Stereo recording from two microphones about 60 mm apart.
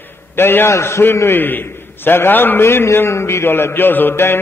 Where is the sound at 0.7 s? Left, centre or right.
Left.